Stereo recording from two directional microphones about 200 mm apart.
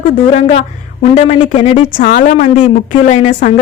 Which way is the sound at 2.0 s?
40° left (ahead or behind).